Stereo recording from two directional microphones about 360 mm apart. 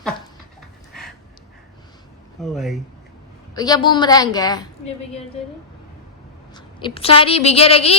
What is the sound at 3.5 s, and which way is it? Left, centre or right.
A woman's voice, centre.